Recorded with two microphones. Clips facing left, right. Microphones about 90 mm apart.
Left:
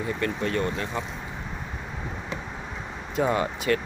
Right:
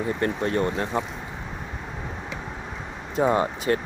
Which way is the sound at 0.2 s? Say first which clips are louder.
Right 2 dB; 30° right (ahead or behind).